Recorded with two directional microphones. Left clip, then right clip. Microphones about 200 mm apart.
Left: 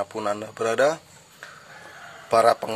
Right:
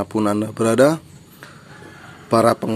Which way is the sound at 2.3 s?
15° right (ahead or behind).